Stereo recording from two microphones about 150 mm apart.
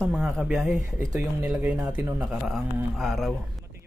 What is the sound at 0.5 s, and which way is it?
Speech, 15° right (ahead or behind).